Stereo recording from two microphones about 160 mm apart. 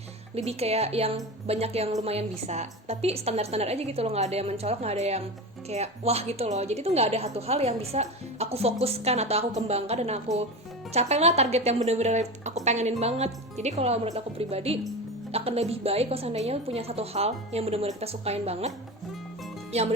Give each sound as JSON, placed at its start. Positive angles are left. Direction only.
{"t": 0.3, "sound": "a woman's voice", "side_deg": -40}
{"t": 19.7, "sound": "a woman's voice", "side_deg": -40}